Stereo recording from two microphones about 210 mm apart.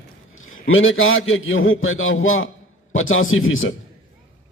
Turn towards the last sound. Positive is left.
turn(degrees=70)  # may be behind; listen again after turning